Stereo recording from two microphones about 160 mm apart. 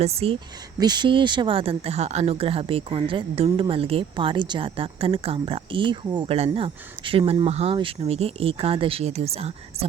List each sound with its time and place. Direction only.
0.0 s speech: 40° right (ahead or behind)
0.8 s speech: 25° right (ahead or behind)